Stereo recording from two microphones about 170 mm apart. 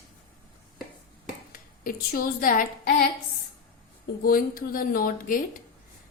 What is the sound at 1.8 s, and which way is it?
A woman's voice, 55° left (ahead or behind).